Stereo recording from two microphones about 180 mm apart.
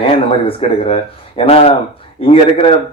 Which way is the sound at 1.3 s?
35° left (ahead or behind).